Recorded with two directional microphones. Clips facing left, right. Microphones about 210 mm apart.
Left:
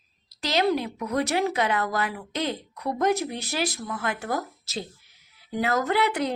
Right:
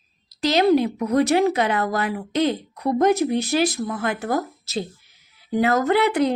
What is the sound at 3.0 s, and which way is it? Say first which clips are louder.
Speech: right 6 dB; 20° right (ahead or behind).